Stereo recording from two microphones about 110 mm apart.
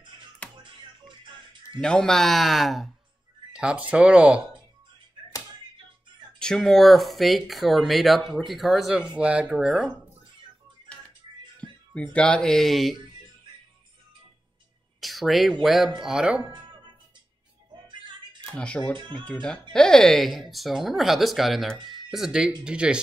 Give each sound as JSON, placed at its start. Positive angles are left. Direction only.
{"t": 0.6, "sound": "music", "side_deg": -45}
{"t": 1.8, "sound": "speech", "side_deg": 5}
{"t": 3.5, "sound": "speech", "side_deg": -10}
{"t": 6.4, "sound": "speech", "side_deg": 5}
{"t": 11.9, "sound": "speech", "side_deg": 10}
{"t": 15.0, "sound": "speech", "side_deg": 0}
{"t": 18.5, "sound": "speech", "side_deg": 10}